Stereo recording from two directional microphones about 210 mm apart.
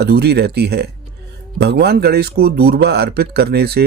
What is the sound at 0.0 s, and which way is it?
Speech, 50° right (ahead or behind).